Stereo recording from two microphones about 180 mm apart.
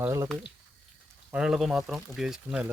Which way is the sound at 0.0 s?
15° right (ahead or behind).